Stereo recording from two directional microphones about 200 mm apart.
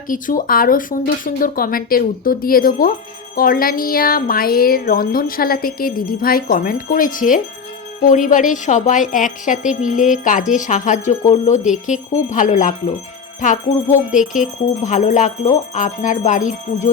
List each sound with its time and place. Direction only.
0.1 s a woman's voice: 45° left (ahead or behind)